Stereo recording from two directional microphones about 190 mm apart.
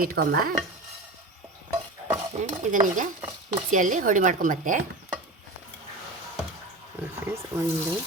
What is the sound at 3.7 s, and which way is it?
Speech, 45° right (ahead or behind).